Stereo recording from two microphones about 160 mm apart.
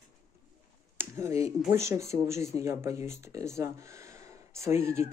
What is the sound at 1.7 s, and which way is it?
Speech, 15° right (ahead or behind).